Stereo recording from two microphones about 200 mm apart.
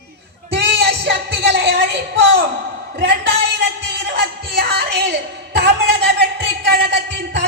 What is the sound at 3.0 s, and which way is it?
Music, 60° right (ahead or behind).